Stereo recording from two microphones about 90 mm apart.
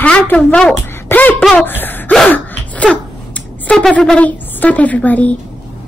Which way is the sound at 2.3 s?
15° left (ahead or behind).